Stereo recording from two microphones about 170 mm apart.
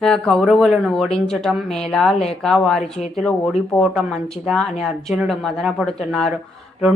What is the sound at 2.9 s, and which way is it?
Speech, 35° left (ahead or behind).